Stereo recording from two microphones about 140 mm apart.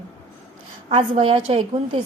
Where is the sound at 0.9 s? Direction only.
45° right (ahead or behind).